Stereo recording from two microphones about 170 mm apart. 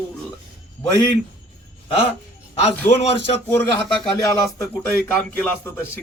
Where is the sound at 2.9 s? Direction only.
40° left (ahead or behind).